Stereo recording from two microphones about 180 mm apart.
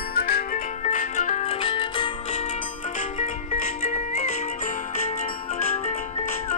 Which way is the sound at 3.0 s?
45° left (ahead or behind).